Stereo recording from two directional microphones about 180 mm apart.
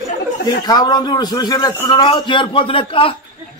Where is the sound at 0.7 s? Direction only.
20° left (ahead or behind).